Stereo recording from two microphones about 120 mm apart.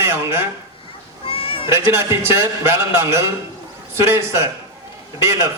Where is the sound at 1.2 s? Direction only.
50° left (ahead or behind).